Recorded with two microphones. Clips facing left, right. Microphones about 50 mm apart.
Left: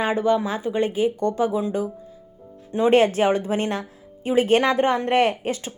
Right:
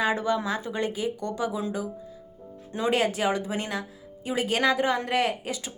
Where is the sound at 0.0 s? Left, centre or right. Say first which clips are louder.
Left 5 dB; left.